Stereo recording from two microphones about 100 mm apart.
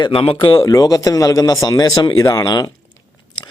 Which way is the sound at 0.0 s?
55° left (ahead or behind).